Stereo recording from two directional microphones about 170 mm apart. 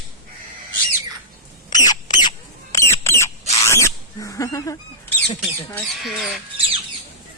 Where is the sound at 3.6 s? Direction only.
15° left (ahead or behind).